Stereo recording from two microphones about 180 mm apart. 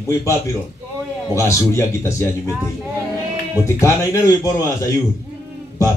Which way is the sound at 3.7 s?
15° left (ahead or behind).